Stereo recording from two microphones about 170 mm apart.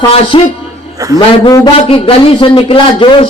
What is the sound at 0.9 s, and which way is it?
Speech, 20° right (ahead or behind).